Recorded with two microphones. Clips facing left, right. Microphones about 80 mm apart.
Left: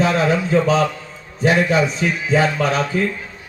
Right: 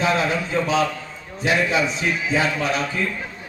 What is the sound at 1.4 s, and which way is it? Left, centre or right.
A man's voice, left.